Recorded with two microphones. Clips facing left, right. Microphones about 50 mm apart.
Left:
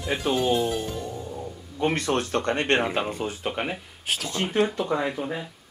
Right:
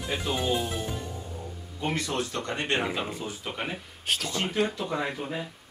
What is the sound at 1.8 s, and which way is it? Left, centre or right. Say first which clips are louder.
Speech: left 5 dB; left.